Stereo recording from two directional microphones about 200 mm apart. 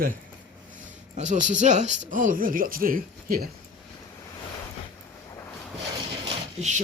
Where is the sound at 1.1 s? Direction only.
40° right (ahead or behind).